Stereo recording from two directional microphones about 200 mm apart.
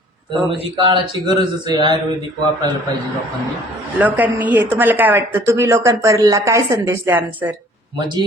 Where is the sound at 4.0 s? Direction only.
10° right (ahead or behind).